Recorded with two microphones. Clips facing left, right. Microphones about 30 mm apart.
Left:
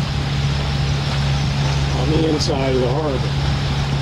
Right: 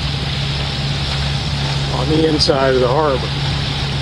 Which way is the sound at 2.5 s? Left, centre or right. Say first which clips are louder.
Right 5 dB; right.